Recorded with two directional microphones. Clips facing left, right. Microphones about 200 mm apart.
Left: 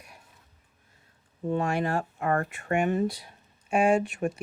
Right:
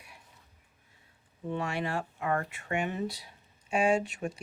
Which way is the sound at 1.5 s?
45° left (ahead or behind).